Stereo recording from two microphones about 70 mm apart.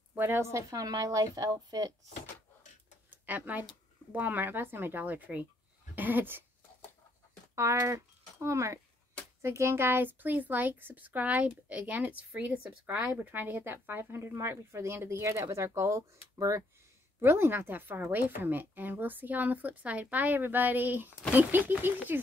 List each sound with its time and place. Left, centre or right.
0.1 s a sound: right
0.4 s a woman's voice: right
0.7 s speech: right
3.1 s a sound: right
4.1 s a woman's voice: right
5.9 s dog: right
7.5 s a woman's voice: right
17.2 s a woman's voice: right